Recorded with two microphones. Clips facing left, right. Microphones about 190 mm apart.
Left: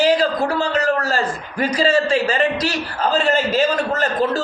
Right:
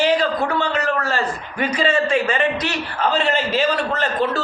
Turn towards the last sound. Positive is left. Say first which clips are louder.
# left 2 dB
turn(degrees=45)  # may be behind; listen again after turning